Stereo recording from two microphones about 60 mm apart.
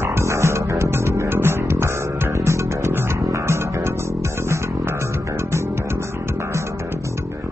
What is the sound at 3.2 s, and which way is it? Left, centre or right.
Music, right.